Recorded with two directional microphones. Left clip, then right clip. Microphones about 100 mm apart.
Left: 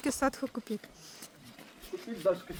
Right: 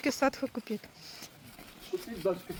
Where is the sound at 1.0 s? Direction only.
30° left (ahead or behind).